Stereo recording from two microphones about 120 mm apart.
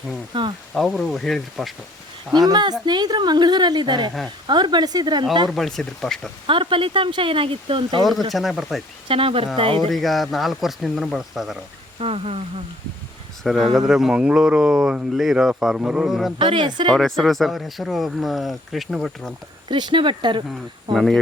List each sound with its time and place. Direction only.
0.3 s speech: 45° right (ahead or behind)
0.7 s speech: centre (ahead or behind)
2.5 s a woman's voice: 35° right (ahead or behind)
5.5 s speech: 5° left (ahead or behind)
6.5 s speech: 45° right (ahead or behind)
8.3 s speech: centre (ahead or behind)
9.0 s speech: 50° right (ahead or behind)
9.9 s speech: centre (ahead or behind)
11.9 s speech: 55° right (ahead or behind)
13.4 s speech: centre (ahead or behind)
16.4 s a woman's voice: 40° right (ahead or behind)
16.9 s speech: centre (ahead or behind)
19.6 s speech: 40° right (ahead or behind)
20.9 s speech: 5° left (ahead or behind)